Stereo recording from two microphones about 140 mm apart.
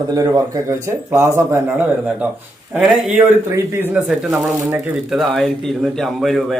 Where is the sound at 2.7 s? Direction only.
5° right (ahead or behind).